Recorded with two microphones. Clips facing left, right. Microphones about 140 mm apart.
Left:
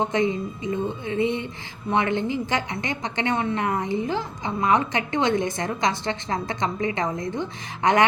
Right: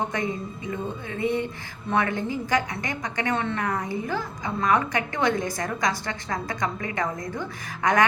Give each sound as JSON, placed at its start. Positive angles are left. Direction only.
{"t": 0.0, "sound": "a woman's voice", "side_deg": 20}